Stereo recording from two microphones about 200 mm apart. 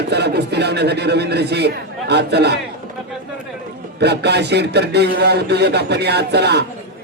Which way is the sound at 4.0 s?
55° right (ahead or behind).